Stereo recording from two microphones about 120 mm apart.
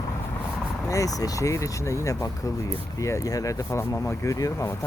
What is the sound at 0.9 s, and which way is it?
Speech, 30° left (ahead or behind).